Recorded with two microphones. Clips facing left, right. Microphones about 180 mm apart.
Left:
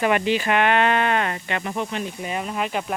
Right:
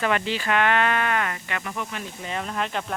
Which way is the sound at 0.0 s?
15° left (ahead or behind).